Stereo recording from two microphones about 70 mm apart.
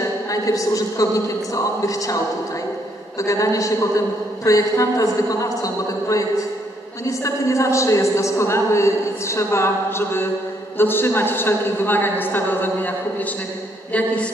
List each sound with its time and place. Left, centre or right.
0.3 s a man's voice: left; by 14.3 s centre